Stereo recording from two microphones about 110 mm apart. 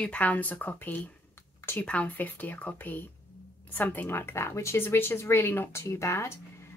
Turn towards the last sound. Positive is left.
turn(degrees=25)  # may be behind; listen again after turning